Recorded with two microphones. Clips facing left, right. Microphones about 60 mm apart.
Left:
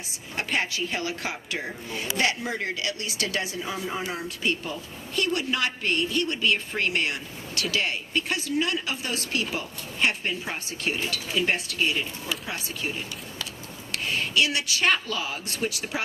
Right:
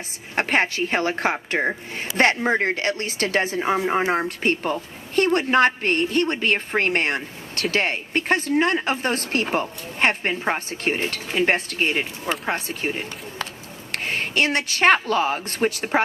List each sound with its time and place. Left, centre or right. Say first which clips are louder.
0.3 s speech: right 7 dB; right